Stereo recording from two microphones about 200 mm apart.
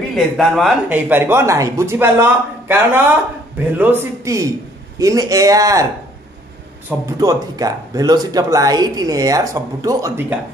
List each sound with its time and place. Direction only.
0.1 s speech: centre (ahead or behind); by 5.9 s 15° right (ahead or behind)
7.1 s speech: 15° right (ahead or behind)